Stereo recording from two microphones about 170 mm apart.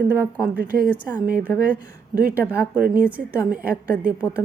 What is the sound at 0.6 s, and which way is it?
Speech, 70° right (ahead or behind).